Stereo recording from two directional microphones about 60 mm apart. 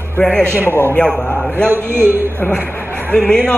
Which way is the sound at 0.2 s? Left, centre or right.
Centre.